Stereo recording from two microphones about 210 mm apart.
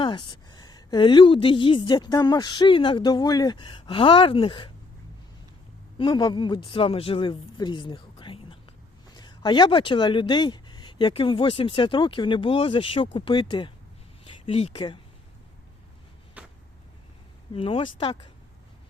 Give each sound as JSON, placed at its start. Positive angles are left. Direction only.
{"t": 0.0, "sound": "a woman's voice", "side_deg": 20}
{"t": 6.0, "sound": "a woman's voice", "side_deg": 20}
{"t": 16.4, "sound": "a sound", "side_deg": -5}
{"t": 17.5, "sound": "a woman's voice", "side_deg": 25}